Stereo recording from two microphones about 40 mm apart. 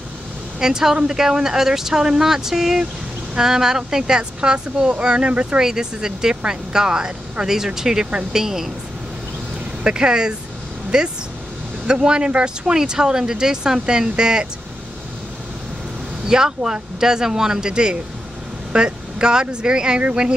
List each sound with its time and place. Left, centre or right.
0.6 s speech: centre; by 5.6 s right
5.6 s speech: centre
9.8 s speech: right
12.7 s speech: centre
16.3 s speech: centre